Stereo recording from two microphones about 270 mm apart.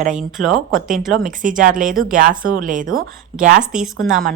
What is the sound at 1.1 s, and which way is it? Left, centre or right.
Speech, right.